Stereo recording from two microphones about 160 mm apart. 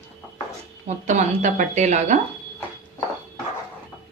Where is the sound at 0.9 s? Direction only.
50° right (ahead or behind).